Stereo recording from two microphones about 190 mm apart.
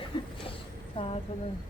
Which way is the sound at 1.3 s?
25° left (ahead or behind).